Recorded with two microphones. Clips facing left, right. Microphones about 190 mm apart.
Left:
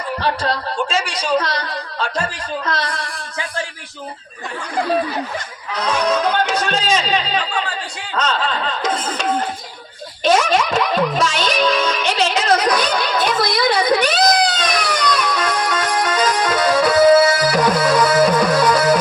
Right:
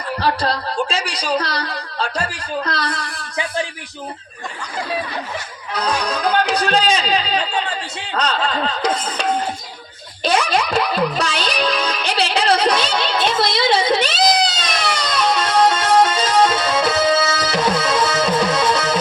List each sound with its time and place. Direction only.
0.2 s speech: 35° right (ahead or behind)
5.8 s speech: 35° right (ahead or behind)
10.2 s music: 35° right (ahead or behind)
14.1 s a sound: 50° left (ahead or behind)
15.2 s music: 25° right (ahead or behind)
17.0 s tabla: 50° left (ahead or behind)
17.4 s tabla: 25° right (ahead or behind)
17.8 s music: 25° right (ahead or behind)